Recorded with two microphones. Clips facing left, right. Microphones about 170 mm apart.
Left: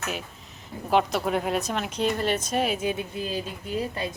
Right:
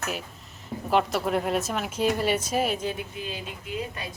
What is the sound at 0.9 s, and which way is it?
A woman's voice, centre (ahead or behind).